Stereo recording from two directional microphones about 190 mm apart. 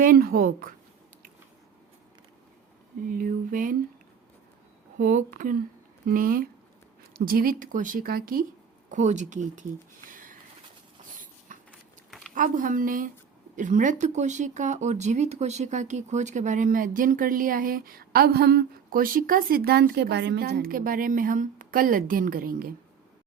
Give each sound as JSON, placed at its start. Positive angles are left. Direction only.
{"t": 0.0, "sound": "speech", "side_deg": -50}
{"t": 3.1, "sound": "speech", "side_deg": -45}
{"t": 4.9, "sound": "speech", "side_deg": -45}
{"t": 10.1, "sound": "a sound", "side_deg": -45}
{"t": 11.5, "sound": "a sound", "side_deg": -45}
{"t": 12.3, "sound": "speech", "side_deg": -45}